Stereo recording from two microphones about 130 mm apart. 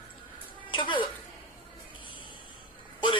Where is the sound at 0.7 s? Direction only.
40° left (ahead or behind).